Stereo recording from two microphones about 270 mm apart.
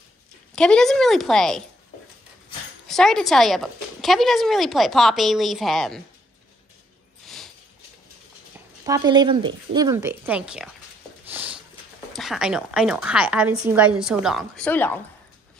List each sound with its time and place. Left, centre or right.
0.6 s speech: centre
2.9 s speech: centre
7.2 s a sound: centre
8.8 s speech: centre
11.2 s a sound: centre
12.1 s speech: centre